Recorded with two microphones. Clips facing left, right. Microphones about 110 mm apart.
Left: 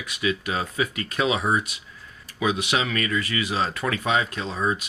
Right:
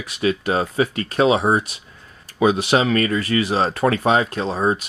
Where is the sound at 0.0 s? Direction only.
35° right (ahead or behind).